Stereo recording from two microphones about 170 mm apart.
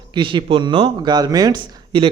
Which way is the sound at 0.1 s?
30° right (ahead or behind).